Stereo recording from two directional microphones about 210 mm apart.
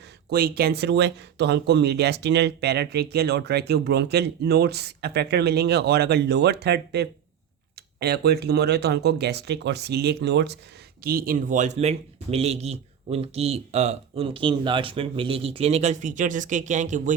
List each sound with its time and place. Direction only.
0.3 s speech: 45° right (ahead or behind)